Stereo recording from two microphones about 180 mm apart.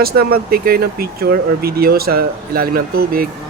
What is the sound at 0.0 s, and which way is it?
Speech, 60° right (ahead or behind).